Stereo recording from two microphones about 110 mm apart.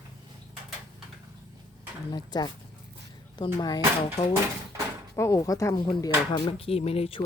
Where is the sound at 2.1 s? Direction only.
40° left (ahead or behind).